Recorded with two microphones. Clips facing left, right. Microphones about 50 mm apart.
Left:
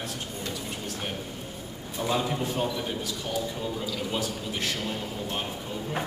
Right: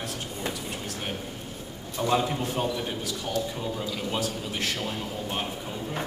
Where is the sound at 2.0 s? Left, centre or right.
Centre.